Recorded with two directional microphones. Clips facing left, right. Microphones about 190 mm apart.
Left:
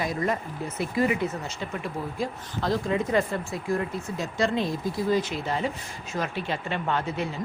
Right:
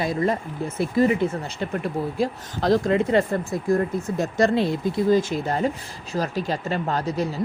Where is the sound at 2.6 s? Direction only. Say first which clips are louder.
Right 6 dB; 75° right (ahead or behind).